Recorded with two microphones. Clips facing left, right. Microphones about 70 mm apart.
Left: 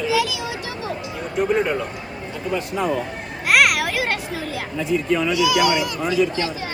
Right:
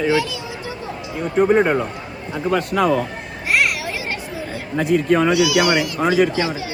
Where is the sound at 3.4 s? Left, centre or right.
Left.